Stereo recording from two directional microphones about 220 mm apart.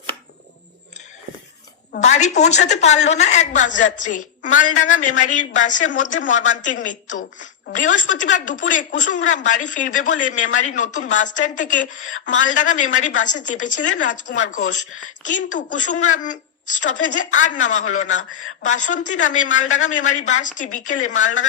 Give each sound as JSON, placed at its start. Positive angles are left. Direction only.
{"t": 1.9, "sound": "a woman's voice", "side_deg": 30}
{"t": 11.9, "sound": "speech", "side_deg": 65}
{"t": 12.3, "sound": "a woman's voice", "side_deg": 35}